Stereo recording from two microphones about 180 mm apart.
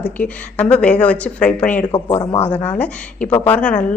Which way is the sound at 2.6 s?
10° left (ahead or behind).